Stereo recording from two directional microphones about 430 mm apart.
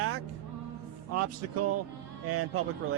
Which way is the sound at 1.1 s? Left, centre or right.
Right.